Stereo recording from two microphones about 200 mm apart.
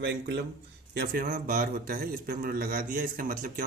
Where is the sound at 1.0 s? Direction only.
45° right (ahead or behind).